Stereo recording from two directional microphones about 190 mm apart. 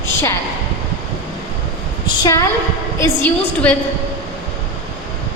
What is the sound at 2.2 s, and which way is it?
A woman's voice, 15° left (ahead or behind).